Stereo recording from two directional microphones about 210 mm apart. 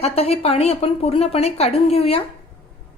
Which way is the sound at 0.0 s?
30° left (ahead or behind).